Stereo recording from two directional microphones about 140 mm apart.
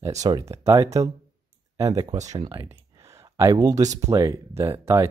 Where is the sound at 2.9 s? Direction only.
20° right (ahead or behind).